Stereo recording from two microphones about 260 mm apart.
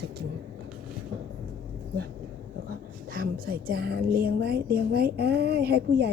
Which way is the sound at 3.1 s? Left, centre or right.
Right.